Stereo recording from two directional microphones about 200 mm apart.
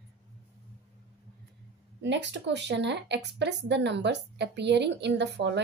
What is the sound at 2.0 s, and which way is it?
A woman's voice, 60° right (ahead or behind).